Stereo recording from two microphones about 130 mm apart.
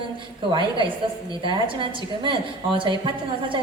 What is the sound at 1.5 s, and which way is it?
A woman's voice, 40° right (ahead or behind).